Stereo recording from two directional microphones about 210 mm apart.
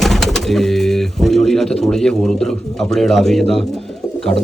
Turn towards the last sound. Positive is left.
turn(degrees=0)  # may be behind; listen again after turning